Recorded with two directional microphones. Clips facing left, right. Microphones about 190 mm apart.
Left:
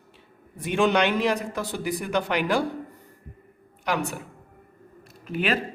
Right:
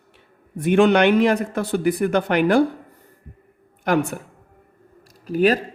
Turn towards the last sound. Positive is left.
turn(degrees=-40)  # may be behind; listen again after turning